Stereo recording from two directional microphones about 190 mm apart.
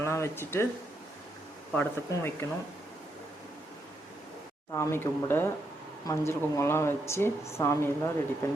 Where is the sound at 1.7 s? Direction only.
10° left (ahead or behind).